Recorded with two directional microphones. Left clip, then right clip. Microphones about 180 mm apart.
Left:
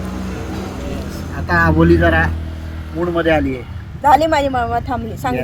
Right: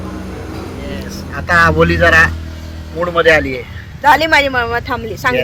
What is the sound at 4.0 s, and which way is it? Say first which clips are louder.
Speech: right 2 dB; 5° right (ahead or behind).